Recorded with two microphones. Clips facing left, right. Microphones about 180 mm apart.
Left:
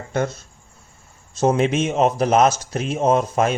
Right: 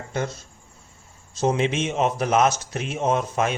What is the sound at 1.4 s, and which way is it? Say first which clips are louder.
Speech: left 4 dB; 50° left (ahead or behind).